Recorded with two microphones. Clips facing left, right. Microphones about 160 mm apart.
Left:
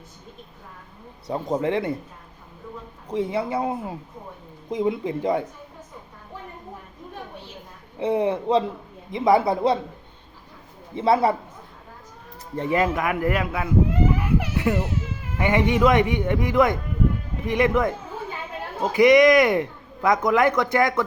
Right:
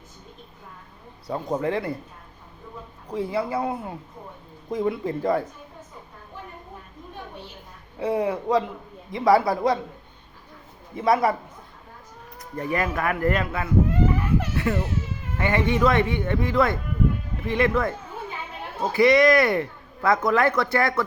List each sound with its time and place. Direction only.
1.3 s speech: 20° left (ahead or behind)
3.1 s speech: 20° left (ahead or behind)
7.9 s speech: 25° left (ahead or behind)
10.9 s speech: 25° left (ahead or behind)
12.5 s speech: 20° left (ahead or behind)
14.2 s baby cry: 15° left (ahead or behind)
15.4 s speech: 15° left (ahead or behind)